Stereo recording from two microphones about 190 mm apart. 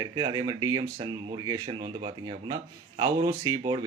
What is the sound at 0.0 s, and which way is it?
Speech, 20° right (ahead or behind).